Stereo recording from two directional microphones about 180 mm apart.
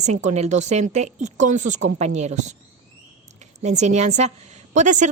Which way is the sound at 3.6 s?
40° right (ahead or behind).